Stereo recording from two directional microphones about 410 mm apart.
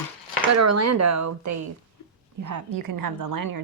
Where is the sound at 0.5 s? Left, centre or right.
Right.